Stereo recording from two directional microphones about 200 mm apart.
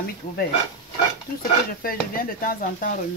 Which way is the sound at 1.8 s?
45° left (ahead or behind).